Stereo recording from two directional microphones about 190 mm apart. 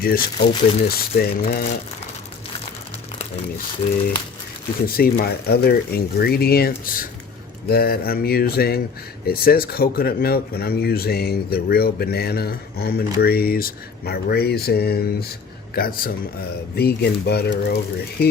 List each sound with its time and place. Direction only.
0.0 s mantra: 50° left (ahead or behind)
0.9 s speech: 55° left (ahead or behind)
3.8 s speech: 30° left (ahead or behind)
4.9 s speech: 50° left (ahead or behind)
7.7 s mantra: 55° left (ahead or behind)
9.2 s speech: 50° left (ahead or behind)